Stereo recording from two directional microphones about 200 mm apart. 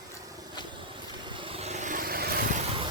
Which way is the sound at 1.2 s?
25° right (ahead or behind).